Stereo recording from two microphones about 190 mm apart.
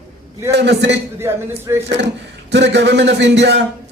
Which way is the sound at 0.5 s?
65° right (ahead or behind).